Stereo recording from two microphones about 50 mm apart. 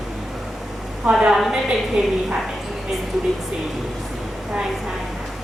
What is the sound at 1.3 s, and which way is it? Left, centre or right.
Speech, centre.